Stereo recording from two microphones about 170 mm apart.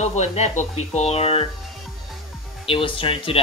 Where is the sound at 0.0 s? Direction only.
40° left (ahead or behind).